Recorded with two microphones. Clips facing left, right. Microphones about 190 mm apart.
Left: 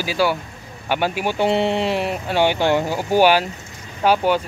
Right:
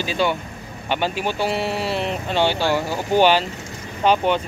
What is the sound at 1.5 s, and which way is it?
Speech, 25° left (ahead or behind).